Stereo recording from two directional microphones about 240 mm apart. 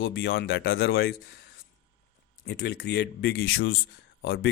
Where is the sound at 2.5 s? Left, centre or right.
Left.